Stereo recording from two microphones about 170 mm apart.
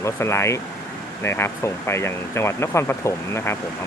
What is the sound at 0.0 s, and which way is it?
Speech, 15° left (ahead or behind).